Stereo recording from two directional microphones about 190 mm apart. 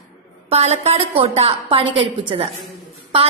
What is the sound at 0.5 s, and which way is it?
A woman's voice, 35° right (ahead or behind).